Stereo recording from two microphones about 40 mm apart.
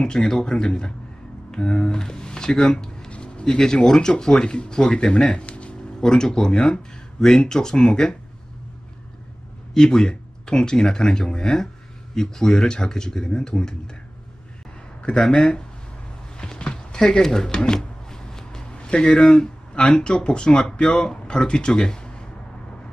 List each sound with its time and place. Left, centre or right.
0.0 s speech: left
3.1 s music: left
3.4 s speech: centre
5.9 s speech: centre
9.8 s speech: centre
15.0 s speech: centre
16.3 s a sound: left
18.8 s a man's voice: left